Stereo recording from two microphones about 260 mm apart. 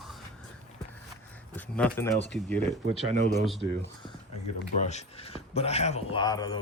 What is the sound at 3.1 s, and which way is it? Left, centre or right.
Speech, right.